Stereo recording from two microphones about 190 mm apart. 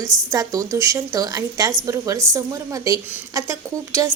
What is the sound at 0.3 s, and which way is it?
A woman's voice, 20° right (ahead or behind).